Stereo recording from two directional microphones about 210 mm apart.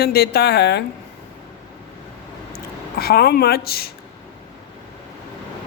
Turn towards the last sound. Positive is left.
turn(degrees=45)  # may be behind; listen again after turning